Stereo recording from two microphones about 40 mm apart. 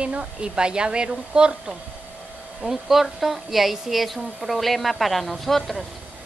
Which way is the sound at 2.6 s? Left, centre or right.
Centre.